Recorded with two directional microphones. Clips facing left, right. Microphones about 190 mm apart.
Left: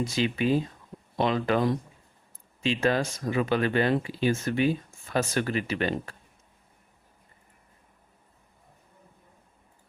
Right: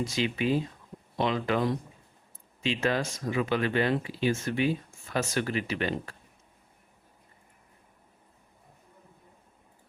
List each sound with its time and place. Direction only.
0.0 s speech: 40° left (ahead or behind)
2.6 s speech: 40° left (ahead or behind)